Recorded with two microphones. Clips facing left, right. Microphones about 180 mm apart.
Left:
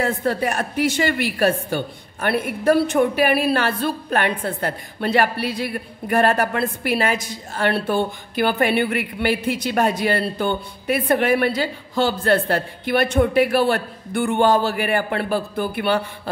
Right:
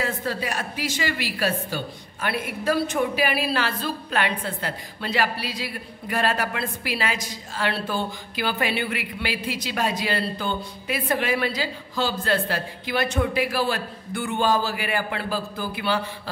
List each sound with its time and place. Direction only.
0.0 s a woman's voice: 55° left (ahead or behind)